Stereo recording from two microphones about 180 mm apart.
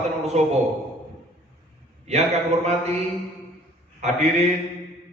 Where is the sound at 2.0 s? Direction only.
35° right (ahead or behind).